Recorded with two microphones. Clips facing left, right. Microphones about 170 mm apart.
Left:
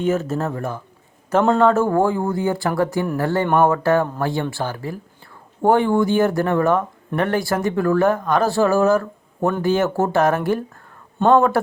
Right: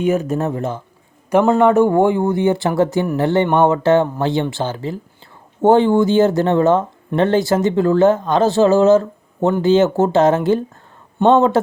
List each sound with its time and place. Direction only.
0.0 s speech: 15° right (ahead or behind)